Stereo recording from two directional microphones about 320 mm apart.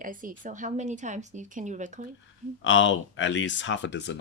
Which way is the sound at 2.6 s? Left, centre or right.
Left.